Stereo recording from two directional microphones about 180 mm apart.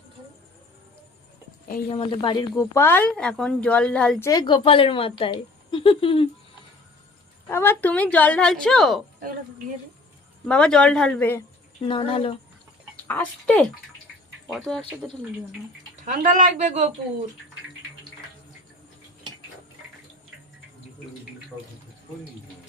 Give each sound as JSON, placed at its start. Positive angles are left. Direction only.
{"t": 1.9, "sound": "speech", "side_deg": 30}
{"t": 4.3, "sound": "speech", "side_deg": 25}
{"t": 7.4, "sound": "speech", "side_deg": 15}
{"t": 10.4, "sound": "speech", "side_deg": 5}
{"t": 11.8, "sound": "speech", "side_deg": 30}
{"t": 13.1, "sound": "speech", "side_deg": 5}
{"t": 16.0, "sound": "speech", "side_deg": -45}